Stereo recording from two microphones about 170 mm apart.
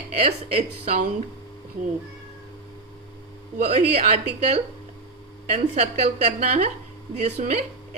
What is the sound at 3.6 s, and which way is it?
Speech, 40° right (ahead or behind).